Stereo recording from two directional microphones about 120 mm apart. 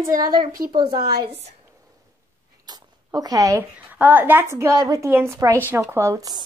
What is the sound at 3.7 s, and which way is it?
A woman's voice, 15° right (ahead or behind).